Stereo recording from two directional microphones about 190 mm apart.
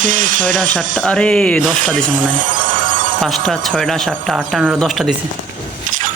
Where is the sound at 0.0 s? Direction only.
45° right (ahead or behind).